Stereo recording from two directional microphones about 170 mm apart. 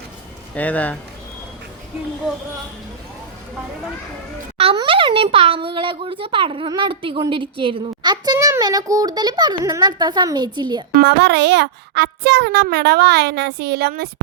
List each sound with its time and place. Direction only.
0.5 s speech: 10° left (ahead or behind)
4.5 s a child's voice: 30° right (ahead or behind)
10.9 s a child's voice: 90° right; by 14.1 s 65° right (ahead or behind)